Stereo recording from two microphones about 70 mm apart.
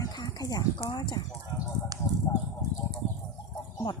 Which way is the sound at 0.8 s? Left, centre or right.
Left.